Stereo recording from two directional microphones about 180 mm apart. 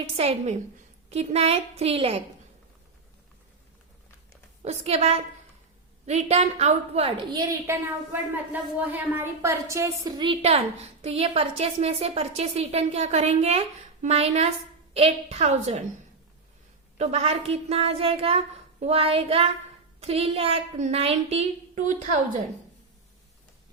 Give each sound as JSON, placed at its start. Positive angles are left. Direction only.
{"t": 0.2, "sound": "a woman's voice", "side_deg": -35}
{"t": 4.6, "sound": "a woman's voice", "side_deg": -35}
{"t": 17.0, "sound": "a woman's voice", "side_deg": -35}